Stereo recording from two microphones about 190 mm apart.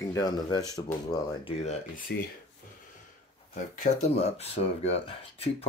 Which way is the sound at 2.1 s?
60° left (ahead or behind).